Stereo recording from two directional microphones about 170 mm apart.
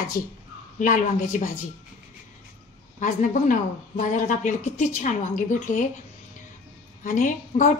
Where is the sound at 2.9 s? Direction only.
50° left (ahead or behind).